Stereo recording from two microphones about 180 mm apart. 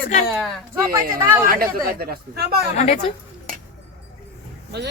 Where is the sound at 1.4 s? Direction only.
55° right (ahead or behind).